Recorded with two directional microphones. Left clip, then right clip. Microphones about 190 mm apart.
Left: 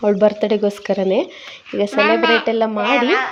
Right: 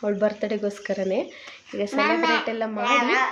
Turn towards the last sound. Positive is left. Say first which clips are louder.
# left 5 dB
turn(degrees=30)  # may be behind; listen again after turning